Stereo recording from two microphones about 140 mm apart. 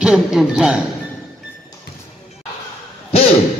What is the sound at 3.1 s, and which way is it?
Hoot, 45° left (ahead or behind).